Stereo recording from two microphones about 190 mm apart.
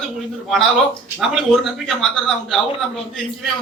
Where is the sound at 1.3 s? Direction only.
Centre (ahead or behind).